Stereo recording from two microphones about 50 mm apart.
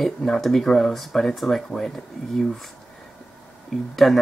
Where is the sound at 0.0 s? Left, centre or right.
Centre.